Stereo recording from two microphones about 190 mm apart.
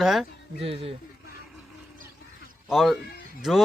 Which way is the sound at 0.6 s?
30° right (ahead or behind).